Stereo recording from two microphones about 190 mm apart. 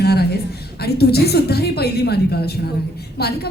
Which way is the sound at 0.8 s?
55° left (ahead or behind).